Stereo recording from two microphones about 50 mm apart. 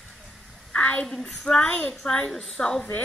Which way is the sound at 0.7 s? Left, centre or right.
Left.